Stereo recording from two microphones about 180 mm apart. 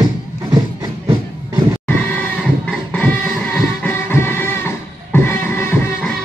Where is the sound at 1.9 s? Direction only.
10° left (ahead or behind).